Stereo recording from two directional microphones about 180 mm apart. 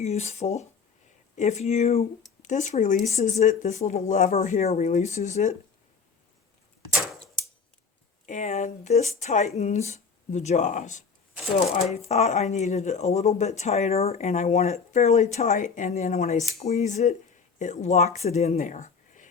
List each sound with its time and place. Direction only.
0.0 s speech: 35° left (ahead or behind)
8.3 s speech: 45° left (ahead or behind)
18.5 s a sound: 45° left (ahead or behind)